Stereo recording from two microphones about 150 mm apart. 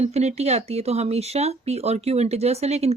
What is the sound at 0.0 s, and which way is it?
Speech, 45° right (ahead or behind).